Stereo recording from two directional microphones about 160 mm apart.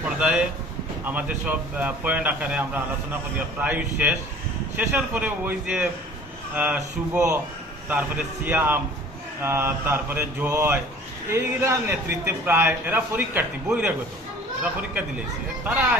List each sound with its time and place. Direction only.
0.2 s a man's voice: 5° right (ahead or behind)